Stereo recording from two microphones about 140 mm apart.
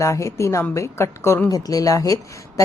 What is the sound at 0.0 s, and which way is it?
A woman's voice, 20° left (ahead or behind).